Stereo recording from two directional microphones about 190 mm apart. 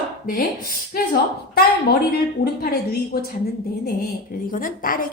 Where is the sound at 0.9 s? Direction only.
55° left (ahead or behind).